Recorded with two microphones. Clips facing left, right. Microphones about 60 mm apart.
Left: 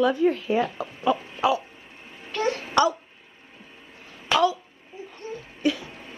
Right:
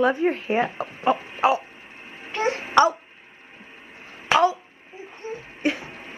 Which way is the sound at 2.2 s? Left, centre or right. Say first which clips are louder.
Right 1 dB; right.